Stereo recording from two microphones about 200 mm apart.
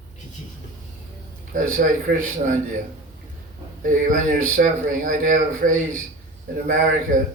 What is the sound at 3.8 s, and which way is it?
Speech, 45° right (ahead or behind).